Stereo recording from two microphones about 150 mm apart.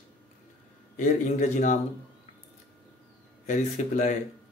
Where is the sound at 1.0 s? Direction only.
55° left (ahead or behind).